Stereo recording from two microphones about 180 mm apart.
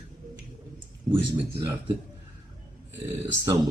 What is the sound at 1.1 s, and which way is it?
Speech, 20° right (ahead or behind).